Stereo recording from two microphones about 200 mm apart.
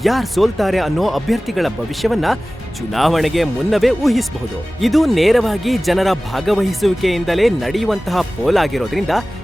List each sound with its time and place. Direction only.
0.0 s speech: centre (ahead or behind)